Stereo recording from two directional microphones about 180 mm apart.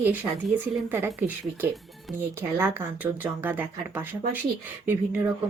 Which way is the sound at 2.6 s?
10° right (ahead or behind).